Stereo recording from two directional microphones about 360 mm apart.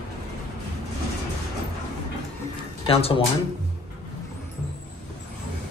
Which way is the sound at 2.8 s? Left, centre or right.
Centre.